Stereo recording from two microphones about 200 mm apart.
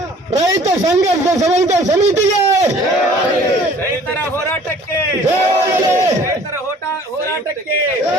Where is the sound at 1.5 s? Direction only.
35° right (ahead or behind).